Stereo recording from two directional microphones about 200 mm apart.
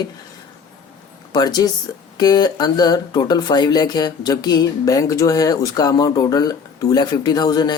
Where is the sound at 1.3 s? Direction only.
20° left (ahead or behind).